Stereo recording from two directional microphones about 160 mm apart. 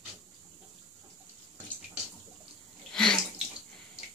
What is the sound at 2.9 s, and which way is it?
Bathtub, 5° left (ahead or behind).